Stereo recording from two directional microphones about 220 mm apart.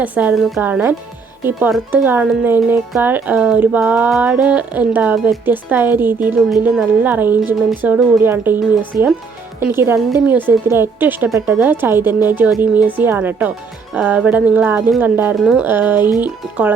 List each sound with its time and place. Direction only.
0.0 s speech: 5° right (ahead or behind)
8.9 s speech: 40° right (ahead or behind)
9.6 s speech: 10° right (ahead or behind)